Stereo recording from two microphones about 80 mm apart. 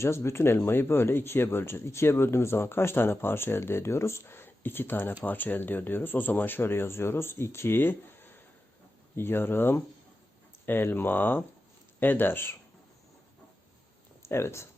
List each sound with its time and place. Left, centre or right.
0.0 s speech: left
14.2 s speech: left